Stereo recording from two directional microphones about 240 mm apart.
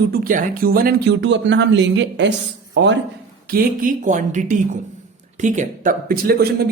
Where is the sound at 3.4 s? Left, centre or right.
Right.